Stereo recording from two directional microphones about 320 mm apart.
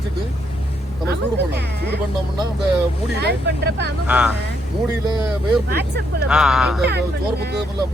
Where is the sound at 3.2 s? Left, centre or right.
Right.